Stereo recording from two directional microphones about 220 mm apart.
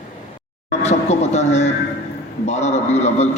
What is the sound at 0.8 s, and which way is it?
Music, 30° left (ahead or behind).